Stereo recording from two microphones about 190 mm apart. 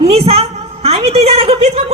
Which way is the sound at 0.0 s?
30° right (ahead or behind).